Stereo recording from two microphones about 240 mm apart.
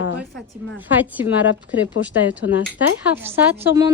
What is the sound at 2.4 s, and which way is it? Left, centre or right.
Speech, left.